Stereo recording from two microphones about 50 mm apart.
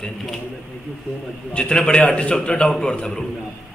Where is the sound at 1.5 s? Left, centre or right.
Left.